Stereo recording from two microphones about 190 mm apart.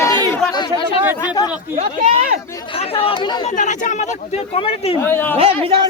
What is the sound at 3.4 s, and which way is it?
Speech, 40° left (ahead or behind).